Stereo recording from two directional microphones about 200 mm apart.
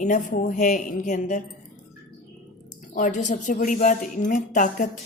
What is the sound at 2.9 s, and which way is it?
Speech, 40° left (ahead or behind).